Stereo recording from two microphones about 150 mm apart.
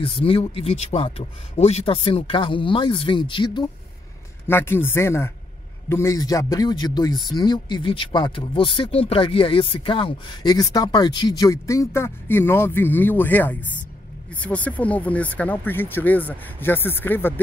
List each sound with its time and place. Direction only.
0.0 s speech: 40° left (ahead or behind)
4.5 s speech: 15° left (ahead or behind)